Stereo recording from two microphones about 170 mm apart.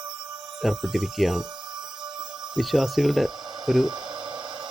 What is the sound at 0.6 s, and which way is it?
Speech, centre (ahead or behind).